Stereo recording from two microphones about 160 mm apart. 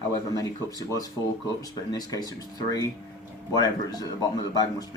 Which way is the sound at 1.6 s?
25° left (ahead or behind).